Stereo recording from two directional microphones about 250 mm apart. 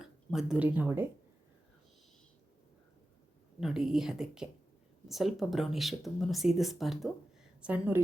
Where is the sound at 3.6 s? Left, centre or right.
Centre.